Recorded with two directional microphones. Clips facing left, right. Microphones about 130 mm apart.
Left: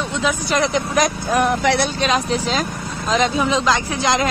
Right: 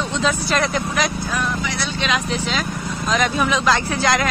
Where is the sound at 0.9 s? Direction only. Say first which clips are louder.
Left 5 dB; 50° left (ahead or behind); by 1.9 s 70° left (ahead or behind).